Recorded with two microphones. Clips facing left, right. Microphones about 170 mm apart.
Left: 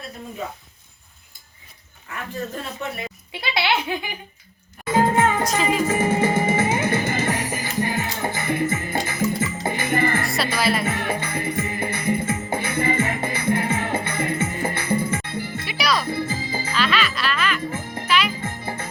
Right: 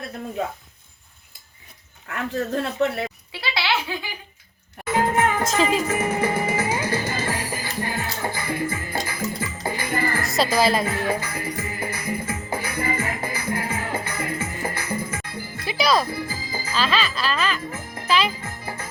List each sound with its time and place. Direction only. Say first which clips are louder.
2.1 s speech: right 3 dB; 65° right (ahead or behind)
3.4 s a child's voice: left 2 dB; 20° left (ahead or behind)
4.9 s music: left 2 dB; 30° left (ahead or behind)
5.4 s music: right 1 dB; 25° right (ahead or behind)
5.8 s music: left 3 dB; 30° left (ahead or behind)
10.2 s music: right 3 dB; 20° right (ahead or behind)
10.8 s music: even; 25° left (ahead or behind)
15.7 s music: right 4 dB; 25° right (ahead or behind)
16.0 s music: left 4 dB; 25° left (ahead or behind)
16.7 s music: even; 30° right (ahead or behind)
17.6 s music: left 4 dB; 25° left (ahead or behind)
18.1 s music: right 1 dB; 30° right (ahead or behind)
18.3 s music: left 4 dB; 25° left (ahead or behind)